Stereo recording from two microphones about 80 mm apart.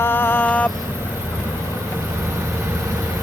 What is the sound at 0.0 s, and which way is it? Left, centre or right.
Vehicle, left.